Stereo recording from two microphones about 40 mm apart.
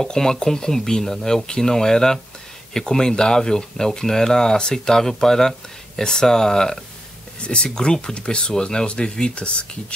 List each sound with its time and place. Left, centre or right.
0.0 s speech: centre
7.3 s speech: left